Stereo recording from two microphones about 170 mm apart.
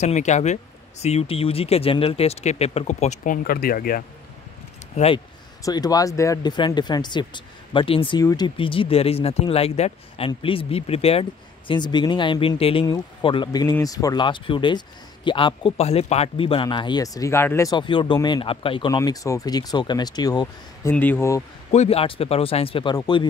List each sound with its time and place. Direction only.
0.0 s speech: 45° left (ahead or behind)
3.4 s speech: 60° left (ahead or behind)
4.9 s speech: 35° left (ahead or behind)
5.6 s speech: 20° left (ahead or behind)
20.9 s speech: 10° left (ahead or behind)
21.7 s speech: 35° left (ahead or behind)